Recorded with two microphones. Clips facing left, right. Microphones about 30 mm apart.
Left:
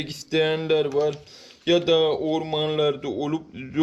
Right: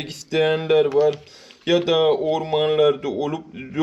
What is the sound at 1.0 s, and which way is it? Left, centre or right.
Speech, centre.